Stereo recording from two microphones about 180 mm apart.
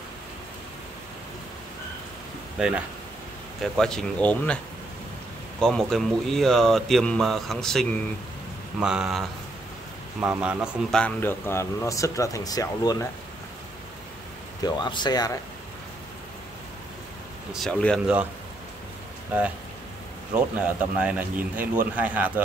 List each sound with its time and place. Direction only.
3.7 s speech: 5° left (ahead or behind)
5.6 s speech: centre (ahead or behind)
10.2 s a man's voice: 5° right (ahead or behind); by 13.1 s 20° left (ahead or behind)
14.6 s speech: 25° left (ahead or behind)
17.5 s speech: centre (ahead or behind)
20.3 s speech: 5° right (ahead or behind)